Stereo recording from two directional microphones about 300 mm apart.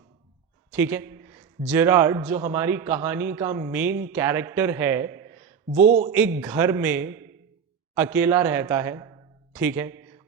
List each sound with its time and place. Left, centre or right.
0.7 s a man's voice: centre
5.7 s a man's voice: right
6.1 s a man's voice: centre